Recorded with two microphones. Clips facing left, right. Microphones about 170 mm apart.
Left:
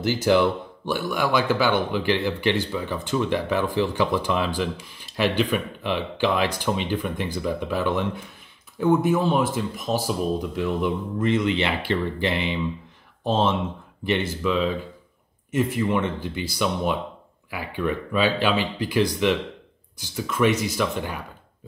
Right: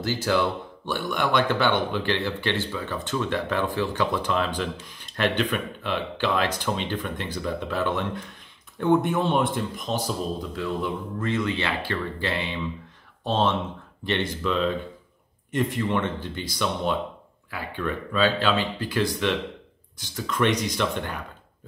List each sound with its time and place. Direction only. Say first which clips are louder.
0.0 s speech: left 4 dB; 15° left (ahead or behind)